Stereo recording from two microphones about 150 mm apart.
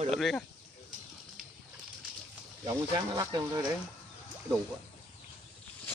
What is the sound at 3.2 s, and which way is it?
Speech, 25° right (ahead or behind).